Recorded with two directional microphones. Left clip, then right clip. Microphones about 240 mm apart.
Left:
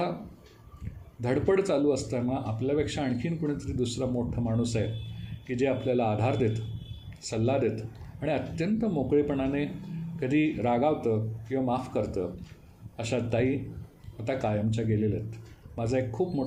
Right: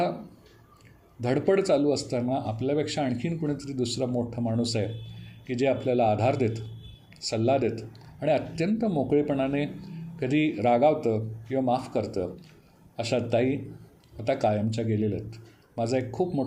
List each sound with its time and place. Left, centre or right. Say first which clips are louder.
1.2 s speech: right 2 dB; right